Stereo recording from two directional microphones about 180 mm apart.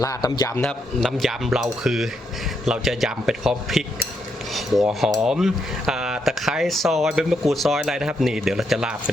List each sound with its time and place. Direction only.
0.0 s a man's voice: 20° left (ahead or behind)
0.6 s speech: centre (ahead or behind)
4.9 s speech: centre (ahead or behind)